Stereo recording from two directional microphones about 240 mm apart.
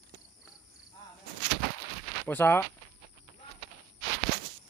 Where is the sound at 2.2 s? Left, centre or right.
Centre.